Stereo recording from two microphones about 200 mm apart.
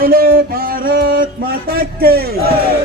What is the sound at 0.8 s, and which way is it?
Music, 45° right (ahead or behind).